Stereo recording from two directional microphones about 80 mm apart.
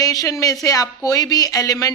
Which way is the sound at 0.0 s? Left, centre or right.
Left.